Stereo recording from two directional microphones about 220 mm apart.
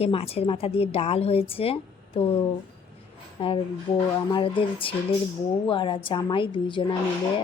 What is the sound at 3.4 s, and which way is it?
A woman's voice, 25° left (ahead or behind).